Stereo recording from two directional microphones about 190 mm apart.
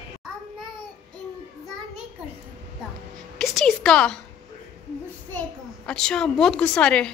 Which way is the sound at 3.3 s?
Centre (ahead or behind).